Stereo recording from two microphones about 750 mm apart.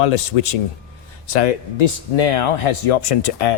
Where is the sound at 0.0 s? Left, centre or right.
Left.